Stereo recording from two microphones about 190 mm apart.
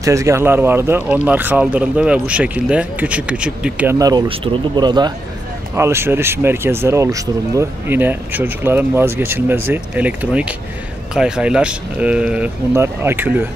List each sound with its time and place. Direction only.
0.0 s speech: 15° right (ahead or behind)
4.0 s speech: 25° right (ahead or behind)